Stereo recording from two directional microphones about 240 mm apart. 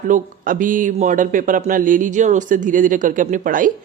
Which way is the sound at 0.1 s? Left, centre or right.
Right.